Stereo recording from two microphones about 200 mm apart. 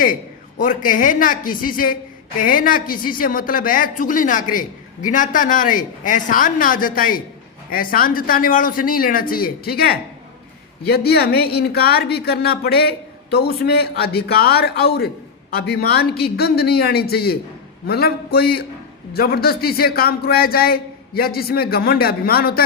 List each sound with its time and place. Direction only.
0.6 s speech: 40° left (ahead or behind)